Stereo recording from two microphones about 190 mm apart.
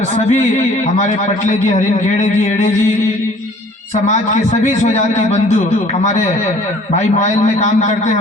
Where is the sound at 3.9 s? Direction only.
35° left (ahead or behind).